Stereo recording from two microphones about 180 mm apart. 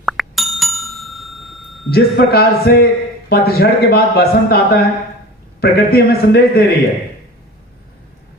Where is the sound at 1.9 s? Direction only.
60° left (ahead or behind).